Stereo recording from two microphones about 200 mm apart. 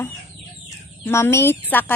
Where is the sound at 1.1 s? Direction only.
10° left (ahead or behind).